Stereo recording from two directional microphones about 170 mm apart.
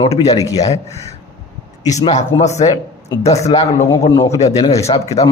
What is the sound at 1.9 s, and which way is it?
A man's voice, 45° left (ahead or behind).